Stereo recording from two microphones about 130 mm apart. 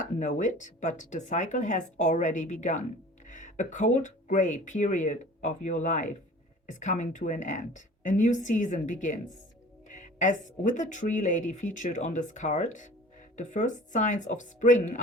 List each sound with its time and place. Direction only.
0.2 s speech: 75° left (ahead or behind)